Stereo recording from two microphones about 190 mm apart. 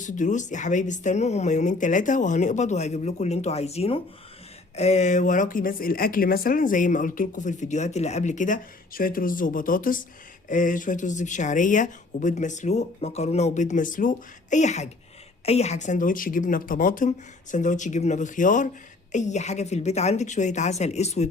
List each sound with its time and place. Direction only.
0.0 s speech: 40° left (ahead or behind)